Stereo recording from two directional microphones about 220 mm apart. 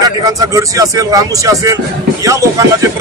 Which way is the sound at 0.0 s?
15° right (ahead or behind).